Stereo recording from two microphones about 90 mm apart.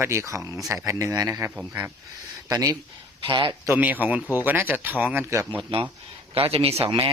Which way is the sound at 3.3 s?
60° right (ahead or behind).